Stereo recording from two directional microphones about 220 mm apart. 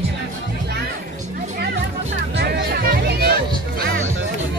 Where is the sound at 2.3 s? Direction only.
45° right (ahead or behind).